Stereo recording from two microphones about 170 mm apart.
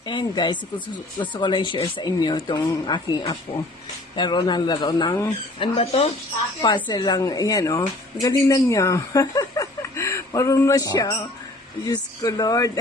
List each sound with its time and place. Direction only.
0.0 s a woman's voice: 25° left (ahead or behind)
5.5 s a woman's voice: 35° left (ahead or behind)